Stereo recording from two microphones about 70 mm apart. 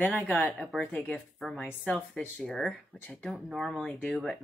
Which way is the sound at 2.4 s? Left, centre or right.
Centre.